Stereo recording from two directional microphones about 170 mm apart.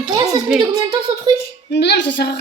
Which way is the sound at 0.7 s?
25° right (ahead or behind).